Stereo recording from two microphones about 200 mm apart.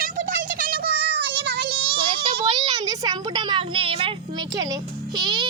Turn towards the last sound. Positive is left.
turn(degrees=-25)  # may be behind; listen again after turning